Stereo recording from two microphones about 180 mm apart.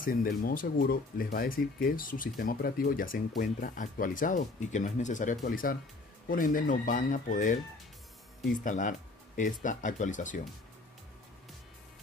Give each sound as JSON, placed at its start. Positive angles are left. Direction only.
{"t": 0.0, "sound": "speech", "side_deg": 50}
{"t": 8.6, "sound": "speech", "side_deg": 45}